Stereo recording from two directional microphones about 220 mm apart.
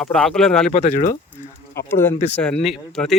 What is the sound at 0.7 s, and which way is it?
Speech, 30° left (ahead or behind).